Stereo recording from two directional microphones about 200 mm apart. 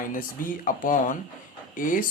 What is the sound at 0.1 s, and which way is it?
Speech, 45° left (ahead or behind).